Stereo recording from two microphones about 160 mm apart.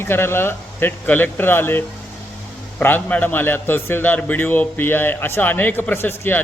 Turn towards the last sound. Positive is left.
turn(degrees=15)  # may be behind; listen again after turning